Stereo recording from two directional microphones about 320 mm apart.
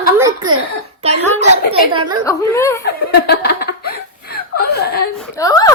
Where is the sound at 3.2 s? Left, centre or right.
Left.